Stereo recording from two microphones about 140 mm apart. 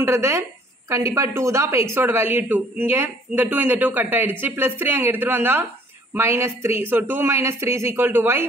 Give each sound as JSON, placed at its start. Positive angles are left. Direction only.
{"t": 0.0, "sound": "a woman's voice", "side_deg": -20}